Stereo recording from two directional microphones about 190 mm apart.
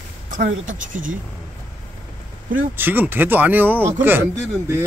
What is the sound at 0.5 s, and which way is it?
Speech, 45° right (ahead or behind).